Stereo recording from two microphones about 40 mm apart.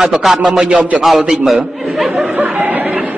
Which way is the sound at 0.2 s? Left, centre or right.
Centre.